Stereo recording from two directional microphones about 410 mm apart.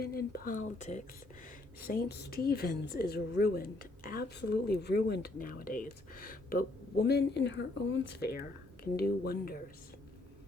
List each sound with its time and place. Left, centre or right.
0.0 s a woman's voice: left